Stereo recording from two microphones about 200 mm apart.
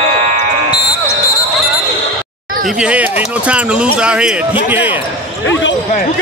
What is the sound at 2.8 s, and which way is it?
Speech, 5° right (ahead or behind).